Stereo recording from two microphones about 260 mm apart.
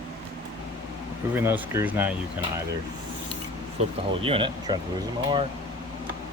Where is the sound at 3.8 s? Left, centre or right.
Right.